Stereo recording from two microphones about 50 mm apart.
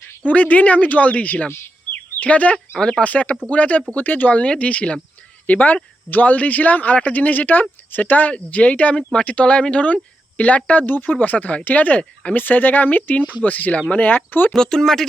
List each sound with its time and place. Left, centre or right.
0.3 s speech: left
1.5 s speech: left
2.1 s speech: left
2.7 s speech: centre
3.0 s speech: left
14.5 s speech: centre